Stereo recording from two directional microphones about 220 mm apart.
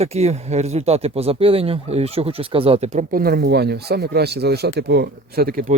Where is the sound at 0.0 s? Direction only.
30° right (ahead or behind).